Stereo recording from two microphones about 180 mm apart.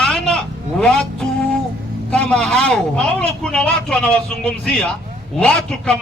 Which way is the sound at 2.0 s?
5° left (ahead or behind).